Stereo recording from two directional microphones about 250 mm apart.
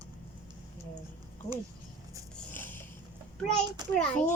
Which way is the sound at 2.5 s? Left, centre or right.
Centre.